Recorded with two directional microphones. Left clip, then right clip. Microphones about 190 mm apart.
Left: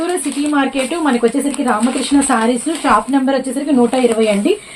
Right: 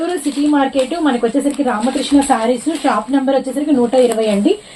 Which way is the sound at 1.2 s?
65° left (ahead or behind).